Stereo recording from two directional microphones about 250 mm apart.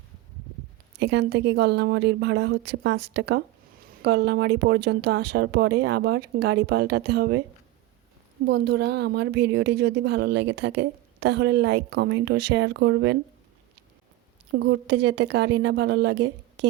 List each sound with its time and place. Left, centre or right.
0.9 s a woman's voice: right
8.4 s a woman's voice: right
14.5 s a woman's voice: right